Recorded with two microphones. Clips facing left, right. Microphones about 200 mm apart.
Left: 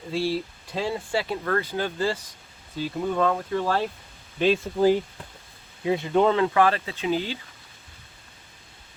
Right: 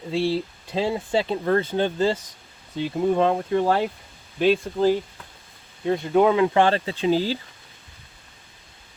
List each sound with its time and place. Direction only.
0.1 s speech: 25° right (ahead or behind)
4.4 s speech: centre (ahead or behind)
5.8 s speech: 5° left (ahead or behind)
6.1 s speech: 10° right (ahead or behind)
6.5 s speech: 30° right (ahead or behind)